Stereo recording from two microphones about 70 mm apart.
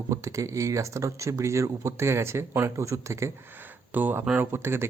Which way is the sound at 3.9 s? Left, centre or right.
Right.